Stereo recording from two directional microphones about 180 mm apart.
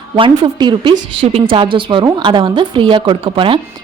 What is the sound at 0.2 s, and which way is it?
A woman's voice, 25° right (ahead or behind).